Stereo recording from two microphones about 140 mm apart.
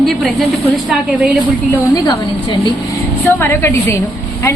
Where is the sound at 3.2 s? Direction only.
15° left (ahead or behind).